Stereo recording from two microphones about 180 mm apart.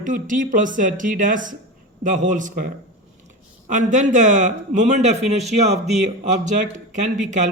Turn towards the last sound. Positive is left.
turn(degrees=-40)  # may be behind; listen again after turning